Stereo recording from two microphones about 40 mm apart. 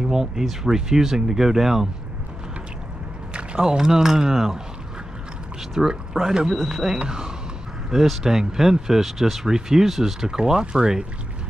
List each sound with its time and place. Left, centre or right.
0.0 s speech: centre
3.3 s speech: centre
5.8 s speech: centre
7.1 s speech: centre